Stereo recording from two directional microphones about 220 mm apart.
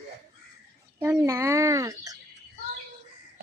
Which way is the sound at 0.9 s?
10° right (ahead or behind).